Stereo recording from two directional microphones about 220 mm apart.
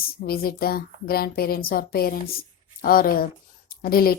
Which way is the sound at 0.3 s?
45° left (ahead or behind).